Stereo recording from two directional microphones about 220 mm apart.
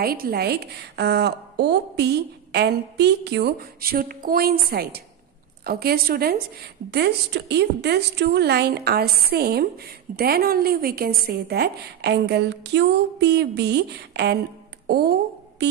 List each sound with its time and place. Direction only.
0.0 s a woman's voice: 45° right (ahead or behind)